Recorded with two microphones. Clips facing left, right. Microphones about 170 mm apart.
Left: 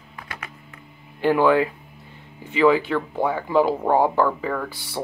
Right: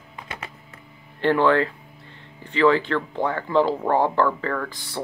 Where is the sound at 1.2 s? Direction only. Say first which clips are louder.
Left 1 dB; 10° left (ahead or behind).